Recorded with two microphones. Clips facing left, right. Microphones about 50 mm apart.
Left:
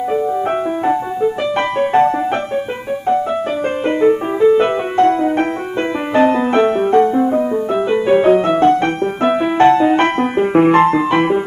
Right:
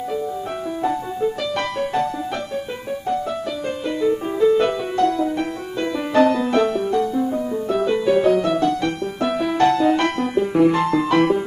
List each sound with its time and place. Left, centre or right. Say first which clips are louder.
0.8 s music: left 4 dB; left
4.0 s music: left 5 dB; left